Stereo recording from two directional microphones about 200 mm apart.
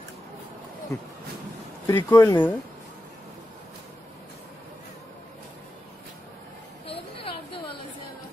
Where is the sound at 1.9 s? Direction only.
15° left (ahead or behind).